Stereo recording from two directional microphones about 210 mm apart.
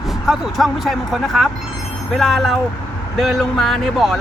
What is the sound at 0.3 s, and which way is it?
Speech, centre (ahead or behind).